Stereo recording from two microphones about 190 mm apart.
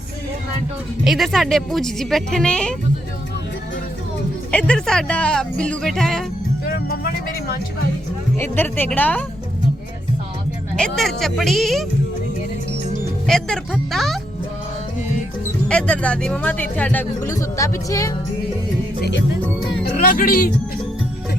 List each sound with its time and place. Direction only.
1.0 s speech: centre (ahead or behind)
4.5 s speech: 5° left (ahead or behind)
6.7 s speech: 55° left (ahead or behind)
8.4 s speech: 10° left (ahead or behind)
10.8 s speech: 5° left (ahead or behind)
13.2 s speech: 5° left (ahead or behind)
15.7 s speech: 5° left (ahead or behind)
19.8 s speech: 50° left (ahead or behind)